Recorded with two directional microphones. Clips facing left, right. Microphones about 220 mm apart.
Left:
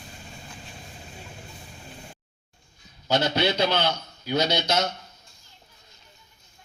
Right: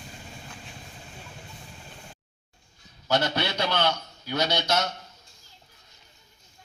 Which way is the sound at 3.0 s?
20° left (ahead or behind).